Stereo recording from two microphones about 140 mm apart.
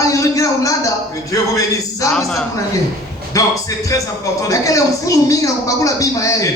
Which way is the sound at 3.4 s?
25° left (ahead or behind).